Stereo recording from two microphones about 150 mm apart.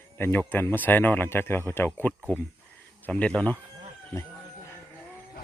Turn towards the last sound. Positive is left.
turn(degrees=15)  # may be behind; listen again after turning